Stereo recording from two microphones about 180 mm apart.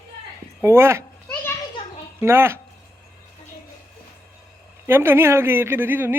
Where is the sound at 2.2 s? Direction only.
15° right (ahead or behind).